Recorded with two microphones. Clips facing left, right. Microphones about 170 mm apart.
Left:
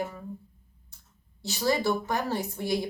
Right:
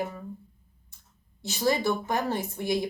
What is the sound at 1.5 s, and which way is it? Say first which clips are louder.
Speech: even; 20° right (ahead or behind).